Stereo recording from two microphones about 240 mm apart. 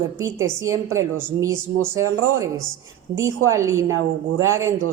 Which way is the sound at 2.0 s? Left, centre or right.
Right.